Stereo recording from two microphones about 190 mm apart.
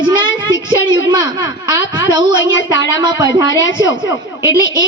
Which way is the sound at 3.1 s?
90° left.